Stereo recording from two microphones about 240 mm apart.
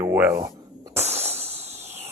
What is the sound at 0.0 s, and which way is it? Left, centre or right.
Speech, centre.